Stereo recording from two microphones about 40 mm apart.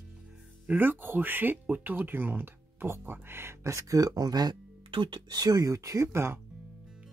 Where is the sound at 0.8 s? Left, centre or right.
Right.